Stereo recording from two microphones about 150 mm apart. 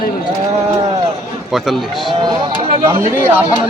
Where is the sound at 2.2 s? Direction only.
35° right (ahead or behind).